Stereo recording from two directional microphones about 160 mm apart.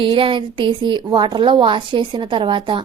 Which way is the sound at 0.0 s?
35° right (ahead or behind).